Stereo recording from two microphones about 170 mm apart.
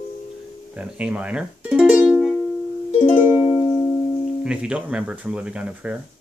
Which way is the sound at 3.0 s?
30° left (ahead or behind).